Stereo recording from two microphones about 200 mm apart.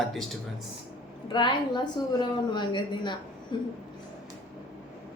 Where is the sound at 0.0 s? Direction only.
Centre (ahead or behind).